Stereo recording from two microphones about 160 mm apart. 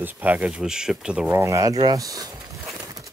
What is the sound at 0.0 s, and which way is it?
Speech, 10° right (ahead or behind).